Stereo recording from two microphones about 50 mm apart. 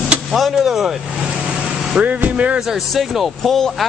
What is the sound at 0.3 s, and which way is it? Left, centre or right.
Speech, centre.